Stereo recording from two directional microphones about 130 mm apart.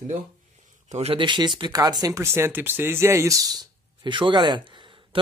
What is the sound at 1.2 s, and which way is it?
A man's voice, 35° right (ahead or behind).